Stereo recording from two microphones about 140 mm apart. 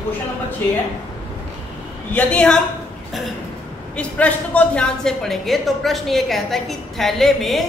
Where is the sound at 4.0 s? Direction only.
10° left (ahead or behind).